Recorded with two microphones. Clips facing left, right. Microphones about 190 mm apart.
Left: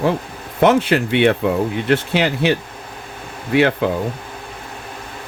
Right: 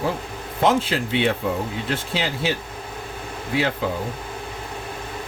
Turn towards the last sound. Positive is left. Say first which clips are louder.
# left 7 dB
turn(degrees=65)  # may be behind; listen again after turning